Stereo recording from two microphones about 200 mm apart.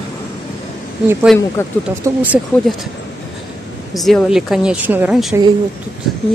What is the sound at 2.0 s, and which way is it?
Speech, 15° right (ahead or behind).